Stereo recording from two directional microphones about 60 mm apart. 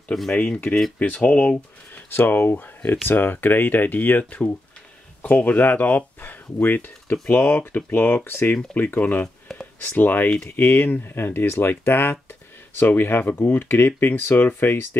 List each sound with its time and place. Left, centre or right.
0.9 s speech: left
2.0 s speech: left
8.2 s speech: left